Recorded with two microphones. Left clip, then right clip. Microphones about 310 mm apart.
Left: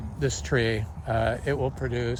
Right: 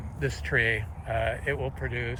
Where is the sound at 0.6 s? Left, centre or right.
Left.